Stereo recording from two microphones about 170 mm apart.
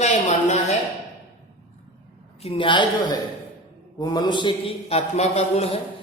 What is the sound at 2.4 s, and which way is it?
Speech, 30° left (ahead or behind).